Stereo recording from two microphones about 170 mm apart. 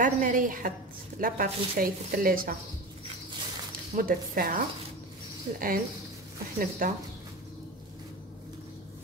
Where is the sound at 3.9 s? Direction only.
55° right (ahead or behind).